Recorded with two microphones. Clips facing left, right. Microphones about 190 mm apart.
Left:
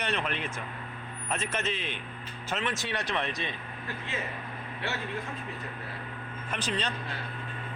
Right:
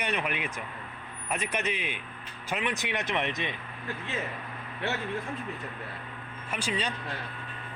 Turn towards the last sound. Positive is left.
turn(degrees=-10)  # may be behind; listen again after turning